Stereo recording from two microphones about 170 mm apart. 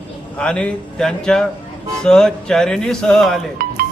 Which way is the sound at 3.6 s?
60° right (ahead or behind).